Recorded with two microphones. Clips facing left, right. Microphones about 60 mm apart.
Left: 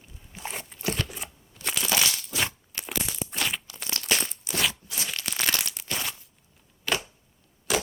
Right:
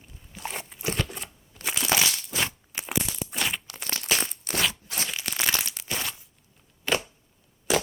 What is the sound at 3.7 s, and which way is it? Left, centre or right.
Crumpling, right.